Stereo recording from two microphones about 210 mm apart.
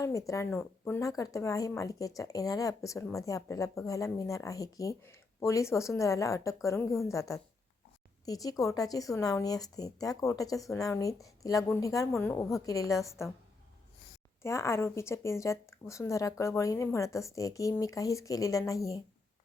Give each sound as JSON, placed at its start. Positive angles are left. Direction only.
{"t": 0.0, "sound": "a woman's voice", "side_deg": 15}
{"t": 14.4, "sound": "a woman's voice", "side_deg": 15}